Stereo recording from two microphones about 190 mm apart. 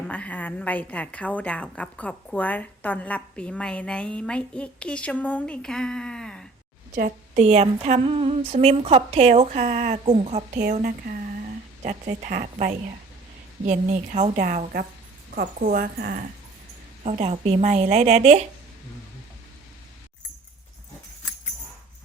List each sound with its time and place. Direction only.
0.1 s a woman's voice: 5° left (ahead or behind)
6.9 s a woman's voice: 40° right (ahead or behind)
10.7 s a woman's voice: 50° right (ahead or behind)
17.0 s a woman's voice: 35° right (ahead or behind)